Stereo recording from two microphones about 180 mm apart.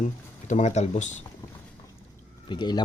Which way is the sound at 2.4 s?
25° left (ahead or behind).